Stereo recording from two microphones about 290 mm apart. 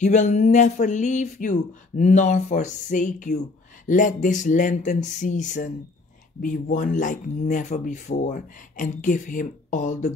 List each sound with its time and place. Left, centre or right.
0.0 s speech: left